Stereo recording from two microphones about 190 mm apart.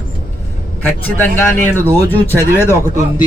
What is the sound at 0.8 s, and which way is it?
Speech, 10° left (ahead or behind).